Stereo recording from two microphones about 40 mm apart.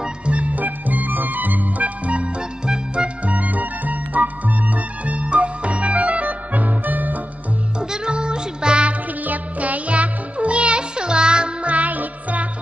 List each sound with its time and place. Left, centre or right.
0.0 s music: right
2.6 s music: right
3.3 s music: right
7.8 s music: centre
9.2 s music for children: right